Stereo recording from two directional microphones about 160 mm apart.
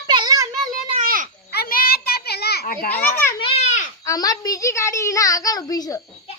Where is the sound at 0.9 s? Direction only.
55° right (ahead or behind).